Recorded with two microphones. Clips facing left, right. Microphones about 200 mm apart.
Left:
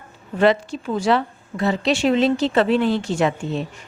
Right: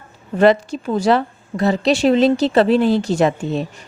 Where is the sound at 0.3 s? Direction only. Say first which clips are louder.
Right 4 dB; 40° right (ahead or behind).